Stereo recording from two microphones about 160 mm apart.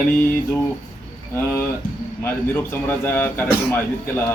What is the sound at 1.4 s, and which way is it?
A man's voice, 15° left (ahead or behind).